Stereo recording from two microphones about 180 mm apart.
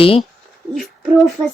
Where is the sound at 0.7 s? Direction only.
Centre (ahead or behind).